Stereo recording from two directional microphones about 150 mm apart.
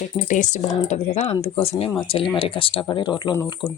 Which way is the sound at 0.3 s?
55° left (ahead or behind).